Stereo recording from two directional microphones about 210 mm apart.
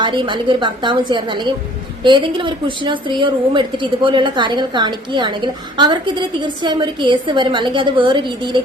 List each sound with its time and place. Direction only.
0.0 s a woman's voice: 20° right (ahead or behind)